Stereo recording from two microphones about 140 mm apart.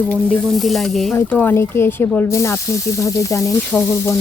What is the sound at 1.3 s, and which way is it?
Speech, 15° left (ahead or behind).